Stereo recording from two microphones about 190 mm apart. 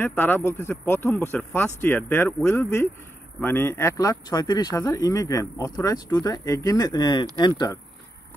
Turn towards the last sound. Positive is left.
turn(degrees=20)  # may be behind; listen again after turning